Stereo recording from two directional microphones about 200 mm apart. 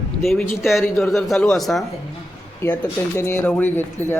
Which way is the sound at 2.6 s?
15° left (ahead or behind).